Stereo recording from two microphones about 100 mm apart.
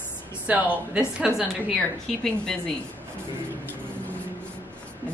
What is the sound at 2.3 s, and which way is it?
Speech, 5° left (ahead or behind).